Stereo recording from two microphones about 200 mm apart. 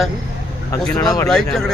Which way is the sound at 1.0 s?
15° left (ahead or behind).